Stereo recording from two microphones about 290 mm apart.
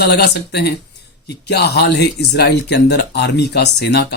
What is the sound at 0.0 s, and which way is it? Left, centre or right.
Speech, left.